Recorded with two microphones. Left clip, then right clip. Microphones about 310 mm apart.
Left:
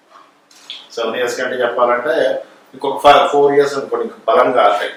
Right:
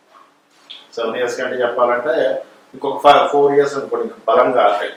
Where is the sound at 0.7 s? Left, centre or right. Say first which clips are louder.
Left 5 dB; centre.